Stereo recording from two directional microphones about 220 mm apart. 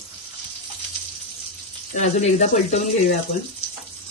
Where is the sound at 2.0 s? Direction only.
35° left (ahead or behind).